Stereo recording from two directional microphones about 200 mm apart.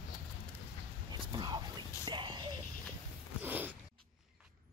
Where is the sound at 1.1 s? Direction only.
20° right (ahead or behind).